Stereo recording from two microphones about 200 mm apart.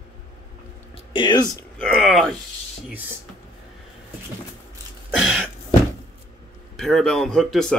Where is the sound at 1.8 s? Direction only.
Centre (ahead or behind).